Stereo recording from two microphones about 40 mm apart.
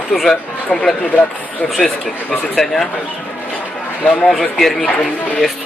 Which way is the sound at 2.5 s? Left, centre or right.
Centre.